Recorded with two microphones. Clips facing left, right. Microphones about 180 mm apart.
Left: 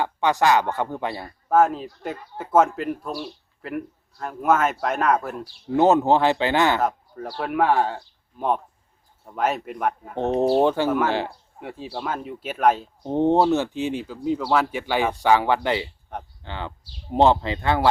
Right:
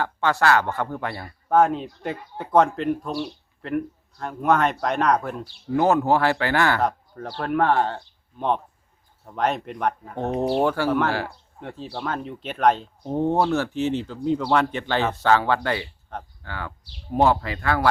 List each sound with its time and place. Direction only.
0.0 s speech: 15° left (ahead or behind)
1.5 s speech: centre (ahead or behind)
5.7 s speech: 20° left (ahead or behind)
6.8 s speech: 10° left (ahead or behind)
10.5 s speech: 20° left (ahead or behind)
11.6 s speech: 10° left (ahead or behind)
13.0 s speech: 20° left (ahead or behind)